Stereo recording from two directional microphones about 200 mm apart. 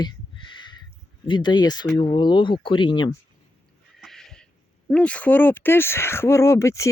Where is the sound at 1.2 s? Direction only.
20° left (ahead or behind).